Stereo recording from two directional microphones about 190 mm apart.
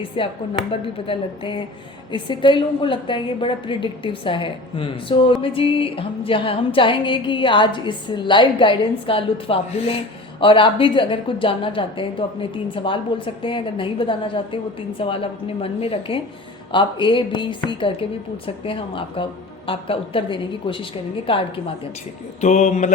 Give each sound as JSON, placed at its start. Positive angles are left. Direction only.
{"t": 0.2, "sound": "a woman's voice", "side_deg": 25}